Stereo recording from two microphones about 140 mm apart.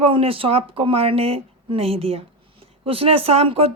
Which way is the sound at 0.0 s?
40° right (ahead or behind).